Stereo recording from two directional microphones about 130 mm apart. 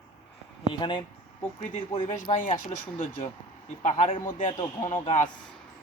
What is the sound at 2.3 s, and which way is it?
Speech, 90° left.